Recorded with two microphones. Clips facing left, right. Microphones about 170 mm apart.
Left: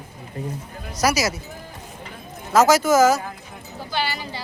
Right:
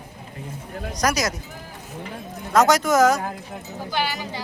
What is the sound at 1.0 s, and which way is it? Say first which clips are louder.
Speech: left 2 dB; 5° left (ahead or behind).